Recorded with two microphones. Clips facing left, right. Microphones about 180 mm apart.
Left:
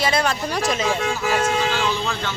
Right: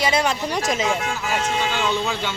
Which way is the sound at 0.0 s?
15° right (ahead or behind).